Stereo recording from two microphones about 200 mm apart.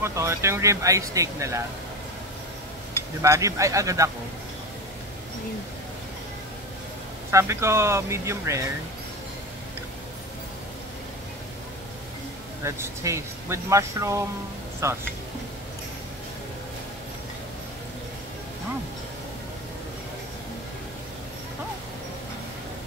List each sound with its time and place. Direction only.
0.0 s speech: 15° right (ahead or behind)
3.2 s speech: 15° right (ahead or behind)
7.2 s speech: 15° right (ahead or behind)
12.6 s speech: 15° right (ahead or behind)